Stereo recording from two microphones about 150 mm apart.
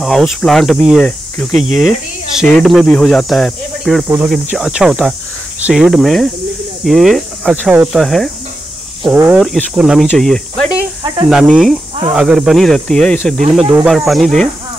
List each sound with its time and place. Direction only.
0.0 s speech: 5° left (ahead or behind)
7.7 s speech: 10° right (ahead or behind)
8.0 s speech: centre (ahead or behind)
9.0 s speech: 10° right (ahead or behind)
9.4 s speech: centre (ahead or behind)